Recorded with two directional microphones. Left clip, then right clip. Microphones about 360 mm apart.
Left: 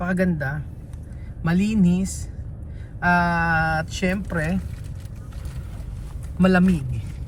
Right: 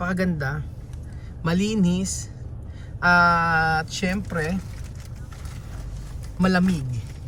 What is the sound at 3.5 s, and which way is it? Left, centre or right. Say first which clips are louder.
Speech: right 1 dB; centre.